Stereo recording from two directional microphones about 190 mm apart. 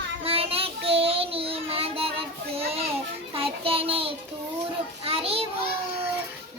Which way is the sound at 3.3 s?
30° right (ahead or behind).